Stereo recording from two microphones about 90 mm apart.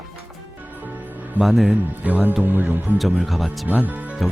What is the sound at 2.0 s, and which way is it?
Speech, 20° right (ahead or behind).